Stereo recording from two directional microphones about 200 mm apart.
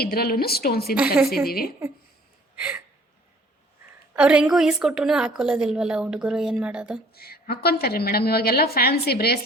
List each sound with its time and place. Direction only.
0.0 s a woman's voice: 50° left (ahead or behind)
0.9 s a woman's voice: 5° right (ahead or behind)
1.5 s a woman's voice: 50° left (ahead or behind)
2.6 s a sound: 5° right (ahead or behind)
4.1 s a woman's voice: 5° right (ahead or behind)
7.1 s a woman's voice: 50° left (ahead or behind)